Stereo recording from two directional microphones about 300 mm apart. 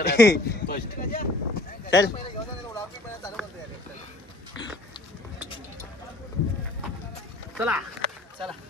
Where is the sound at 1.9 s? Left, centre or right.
Centre.